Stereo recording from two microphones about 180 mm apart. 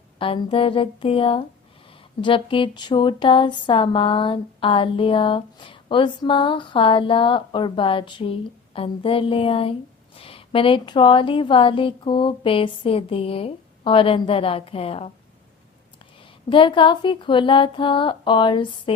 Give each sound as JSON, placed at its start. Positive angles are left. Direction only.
{"t": 0.2, "sound": "speech", "side_deg": 30}
{"t": 16.5, "sound": "speech", "side_deg": 25}